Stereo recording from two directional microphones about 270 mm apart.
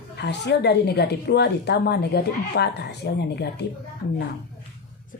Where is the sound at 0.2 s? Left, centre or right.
Left.